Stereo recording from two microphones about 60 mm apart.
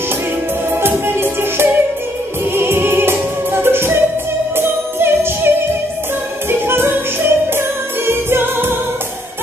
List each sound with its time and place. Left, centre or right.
0.7 s music: right
6.7 s music: right